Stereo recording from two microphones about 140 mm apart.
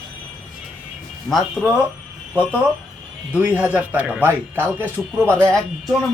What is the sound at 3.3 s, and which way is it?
Speech, 10° right (ahead or behind).